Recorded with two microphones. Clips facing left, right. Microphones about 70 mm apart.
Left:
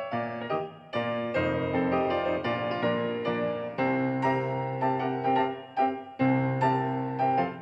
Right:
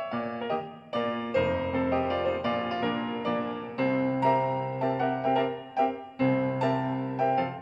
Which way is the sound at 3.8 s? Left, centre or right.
Centre.